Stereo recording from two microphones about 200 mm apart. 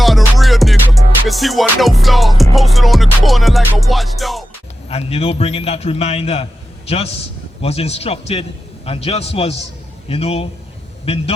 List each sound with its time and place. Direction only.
0.0 s music: centre (ahead or behind)
4.9 s a man's voice: 30° left (ahead or behind)